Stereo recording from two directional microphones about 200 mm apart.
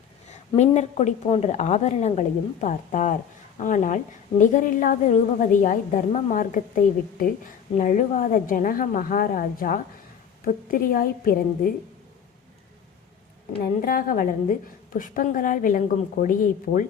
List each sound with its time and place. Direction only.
0.3 s a woman's voice: 35° left (ahead or behind)
13.8 s a woman's voice: 45° left (ahead or behind)